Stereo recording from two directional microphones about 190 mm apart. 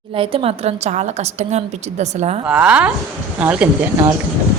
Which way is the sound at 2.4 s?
5° right (ahead or behind).